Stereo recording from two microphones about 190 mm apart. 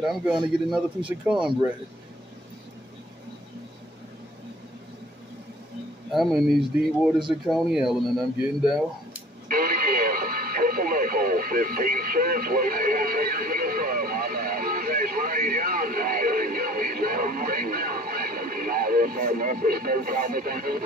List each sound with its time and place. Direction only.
0.0 s speech: 5° right (ahead or behind)
6.1 s speech: centre (ahead or behind)
9.5 s radio: 50° right (ahead or behind)